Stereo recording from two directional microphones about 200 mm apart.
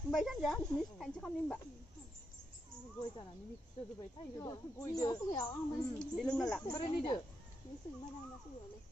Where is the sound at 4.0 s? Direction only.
15° left (ahead or behind).